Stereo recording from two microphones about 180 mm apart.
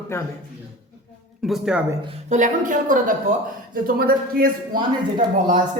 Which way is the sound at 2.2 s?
45° right (ahead or behind).